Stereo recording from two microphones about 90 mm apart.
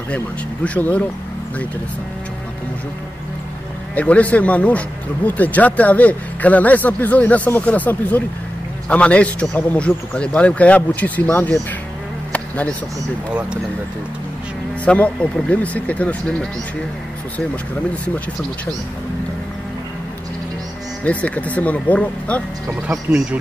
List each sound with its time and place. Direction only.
0.7 s speech: 15° left (ahead or behind)
3.9 s speech: 15° left (ahead or behind)
12.3 s a sound: 15° left (ahead or behind)
14.9 s speech: 10° left (ahead or behind)
21.0 s speech: 15° left (ahead or behind)